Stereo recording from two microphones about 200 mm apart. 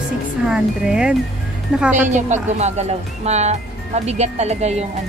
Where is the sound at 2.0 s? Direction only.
35° right (ahead or behind).